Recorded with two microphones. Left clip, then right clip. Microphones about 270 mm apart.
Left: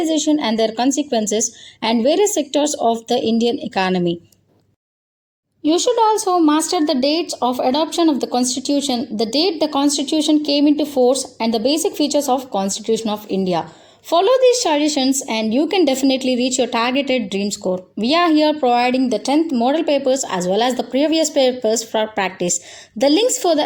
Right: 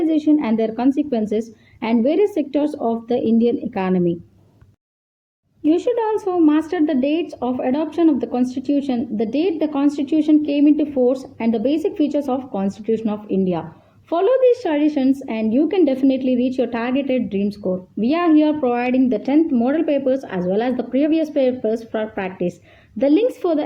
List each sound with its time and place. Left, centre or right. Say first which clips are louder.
0.1 s a woman's voice: even; right
5.6 s a woman's voice: left 3 dB; right